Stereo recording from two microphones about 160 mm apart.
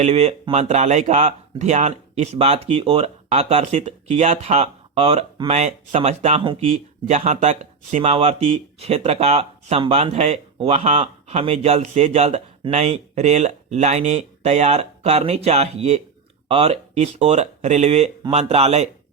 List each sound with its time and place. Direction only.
0.0 s speech: 40° right (ahead or behind)
6.4 s speech: 30° right (ahead or behind)
7.1 s speech: 45° right (ahead or behind)